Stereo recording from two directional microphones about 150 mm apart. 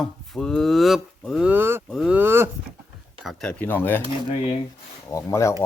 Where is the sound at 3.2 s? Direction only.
5° left (ahead or behind).